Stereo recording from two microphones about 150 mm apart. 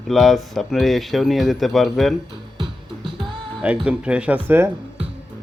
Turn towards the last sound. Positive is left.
turn(degrees=-15)  # may be behind; listen again after turning